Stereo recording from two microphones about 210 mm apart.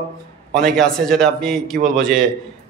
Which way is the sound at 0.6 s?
Centre (ahead or behind).